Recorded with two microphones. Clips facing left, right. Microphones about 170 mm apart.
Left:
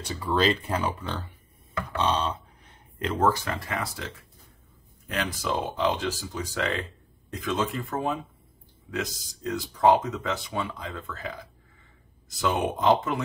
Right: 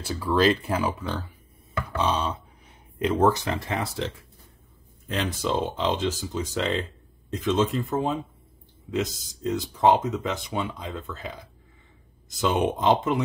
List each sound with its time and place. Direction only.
0.0 s speech: centre (ahead or behind); by 13.2 s 20° right (ahead or behind)